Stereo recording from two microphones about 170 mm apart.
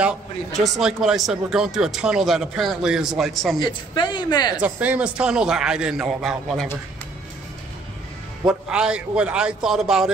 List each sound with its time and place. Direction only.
0.7 s speech: centre (ahead or behind)
3.5 s speech: 25° left (ahead or behind)
4.6 s speech: 10° right (ahead or behind)
8.5 s speech: 5° right (ahead or behind)